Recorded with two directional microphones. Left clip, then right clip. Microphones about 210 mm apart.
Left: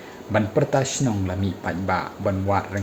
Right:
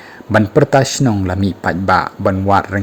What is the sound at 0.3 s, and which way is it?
Speech, 45° right (ahead or behind).